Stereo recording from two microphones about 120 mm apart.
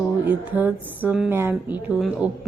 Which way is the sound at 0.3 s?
15° right (ahead or behind).